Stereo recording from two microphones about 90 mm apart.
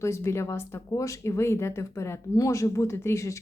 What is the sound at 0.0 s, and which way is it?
Speech, 30° left (ahead or behind).